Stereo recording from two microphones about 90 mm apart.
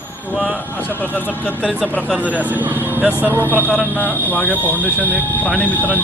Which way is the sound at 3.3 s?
25° right (ahead or behind).